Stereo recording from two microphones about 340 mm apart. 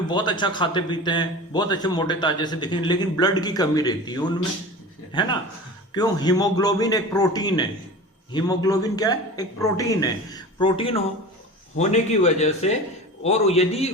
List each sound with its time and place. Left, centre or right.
0.1 s a man's voice: centre